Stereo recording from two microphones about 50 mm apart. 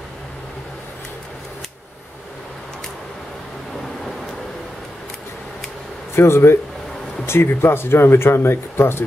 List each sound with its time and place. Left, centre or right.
6.1 s speech: left